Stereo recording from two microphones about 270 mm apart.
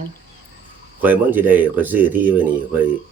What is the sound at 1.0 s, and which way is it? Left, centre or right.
Speech, centre.